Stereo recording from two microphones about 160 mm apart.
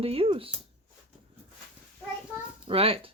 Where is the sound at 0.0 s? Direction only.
35° right (ahead or behind).